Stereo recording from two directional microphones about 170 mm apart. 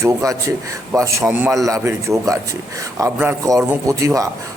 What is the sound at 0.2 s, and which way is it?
A man's voice, 20° right (ahead or behind).